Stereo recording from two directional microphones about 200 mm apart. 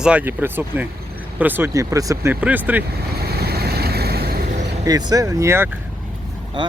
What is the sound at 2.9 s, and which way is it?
Vehicle, 50° right (ahead or behind).